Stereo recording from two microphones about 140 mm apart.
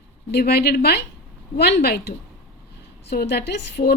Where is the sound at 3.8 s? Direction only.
65° left (ahead or behind).